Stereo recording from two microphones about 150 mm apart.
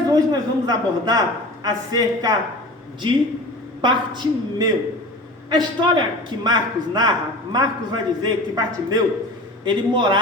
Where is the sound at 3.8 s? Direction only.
30° right (ahead or behind).